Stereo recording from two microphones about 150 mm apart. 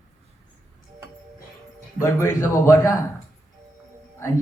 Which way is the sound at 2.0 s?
20° left (ahead or behind).